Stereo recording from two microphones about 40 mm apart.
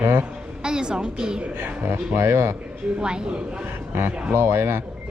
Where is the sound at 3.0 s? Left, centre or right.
Right.